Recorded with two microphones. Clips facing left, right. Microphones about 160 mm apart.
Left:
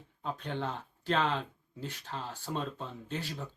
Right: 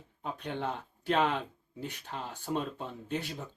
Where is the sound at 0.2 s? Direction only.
15° right (ahead or behind).